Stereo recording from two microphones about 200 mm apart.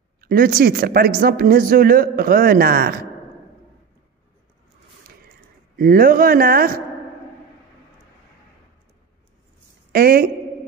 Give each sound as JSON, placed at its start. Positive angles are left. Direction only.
{"t": 0.2, "sound": "speech", "side_deg": -45}
{"t": 5.8, "sound": "speech", "side_deg": -45}
{"t": 9.9, "sound": "speech", "side_deg": -50}